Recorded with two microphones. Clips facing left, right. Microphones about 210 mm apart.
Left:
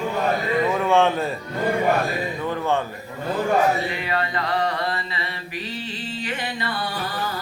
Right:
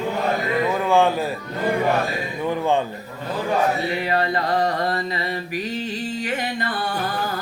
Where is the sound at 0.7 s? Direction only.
Centre (ahead or behind).